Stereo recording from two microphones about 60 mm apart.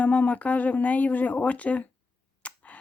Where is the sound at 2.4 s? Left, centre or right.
Left.